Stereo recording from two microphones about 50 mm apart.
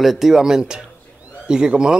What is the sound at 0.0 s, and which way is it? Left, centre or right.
A man's voice, centre.